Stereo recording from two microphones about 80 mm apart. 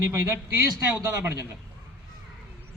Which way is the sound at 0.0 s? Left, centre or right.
Right.